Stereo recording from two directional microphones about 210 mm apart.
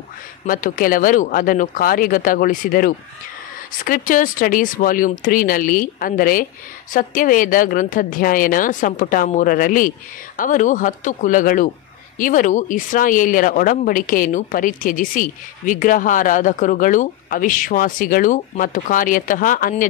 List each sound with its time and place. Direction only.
0.5 s speech: 40° left (ahead or behind)